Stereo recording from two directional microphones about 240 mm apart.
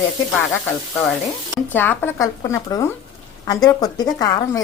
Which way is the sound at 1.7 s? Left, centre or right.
Centre.